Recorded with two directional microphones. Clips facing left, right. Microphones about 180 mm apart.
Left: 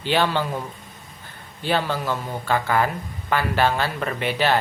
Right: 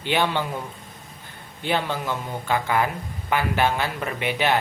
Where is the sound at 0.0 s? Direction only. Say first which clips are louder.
Left 2 dB; 15° right (ahead or behind).